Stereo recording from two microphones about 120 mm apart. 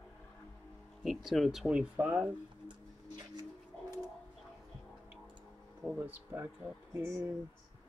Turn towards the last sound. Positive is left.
turn(degrees=-20)  # may be behind; listen again after turning